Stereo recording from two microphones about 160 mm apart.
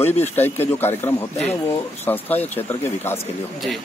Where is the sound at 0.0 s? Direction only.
15° left (ahead or behind).